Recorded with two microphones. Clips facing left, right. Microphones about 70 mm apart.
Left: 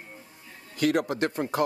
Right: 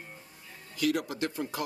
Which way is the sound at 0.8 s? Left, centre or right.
Left.